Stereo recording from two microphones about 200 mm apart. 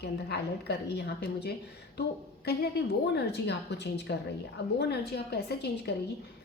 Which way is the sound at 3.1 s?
55° left (ahead or behind).